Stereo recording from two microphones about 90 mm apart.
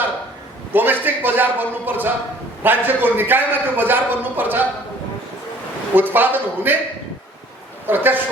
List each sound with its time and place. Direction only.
0.7 s a man's voice: 20° right (ahead or behind)
5.9 s a man's voice: 20° right (ahead or behind)
7.9 s a man's voice: 20° right (ahead or behind)